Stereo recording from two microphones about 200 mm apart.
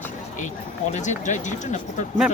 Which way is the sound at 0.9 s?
35° left (ahead or behind).